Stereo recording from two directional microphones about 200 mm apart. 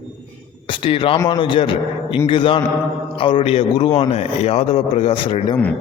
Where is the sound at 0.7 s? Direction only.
25° left (ahead or behind).